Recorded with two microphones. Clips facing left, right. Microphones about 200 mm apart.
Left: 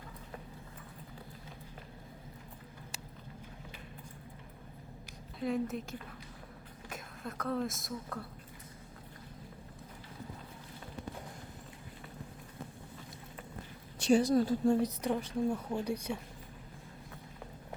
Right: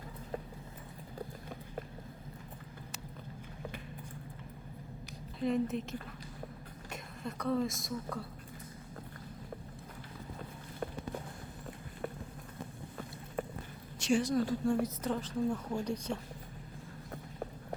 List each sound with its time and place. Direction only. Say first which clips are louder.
5.4 s a woman's voice: right 2 dB; centre (ahead or behind)
13.4 s a sound: right 14 dB; 55° right (ahead or behind)
14.1 s a woman's voice: left 3 dB; 35° left (ahead or behind)
14.8 s a woman's voice: left 2 dB; 15° left (ahead or behind)